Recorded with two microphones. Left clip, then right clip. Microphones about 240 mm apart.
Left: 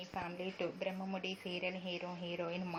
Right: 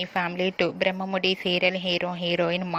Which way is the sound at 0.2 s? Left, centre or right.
Right.